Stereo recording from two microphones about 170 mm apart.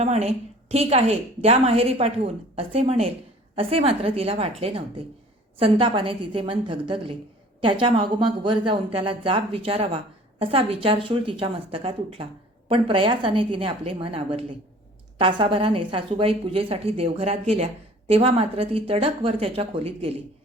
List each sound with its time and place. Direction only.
0.0 s a woman's voice: 40° right (ahead or behind)